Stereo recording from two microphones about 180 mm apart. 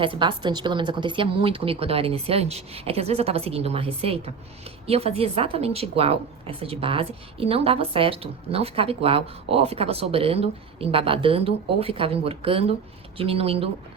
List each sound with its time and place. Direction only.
0.0 s a woman's voice: 30° right (ahead or behind)